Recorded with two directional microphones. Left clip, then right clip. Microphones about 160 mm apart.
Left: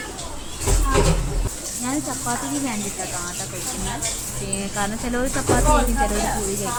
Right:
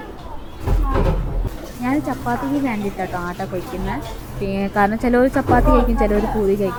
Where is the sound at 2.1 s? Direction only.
25° right (ahead or behind).